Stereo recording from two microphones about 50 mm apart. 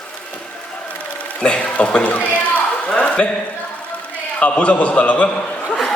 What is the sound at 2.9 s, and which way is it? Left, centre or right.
Speech, centre.